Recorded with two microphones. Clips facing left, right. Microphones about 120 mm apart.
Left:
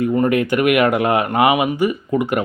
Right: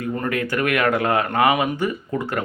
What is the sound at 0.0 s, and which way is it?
Speech, 20° left (ahead or behind).